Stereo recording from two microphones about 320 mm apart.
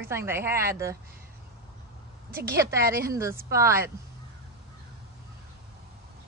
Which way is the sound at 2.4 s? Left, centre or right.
Centre.